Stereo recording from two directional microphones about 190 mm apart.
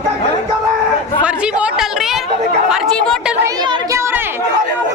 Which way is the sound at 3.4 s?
20° right (ahead or behind).